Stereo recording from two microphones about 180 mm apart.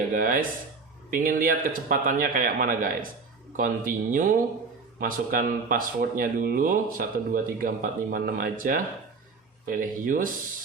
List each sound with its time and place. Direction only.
0.1 s speech: 50° right (ahead or behind)